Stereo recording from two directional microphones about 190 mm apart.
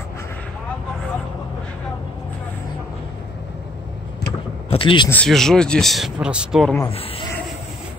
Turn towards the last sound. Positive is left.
turn(degrees=30)  # may be behind; listen again after turning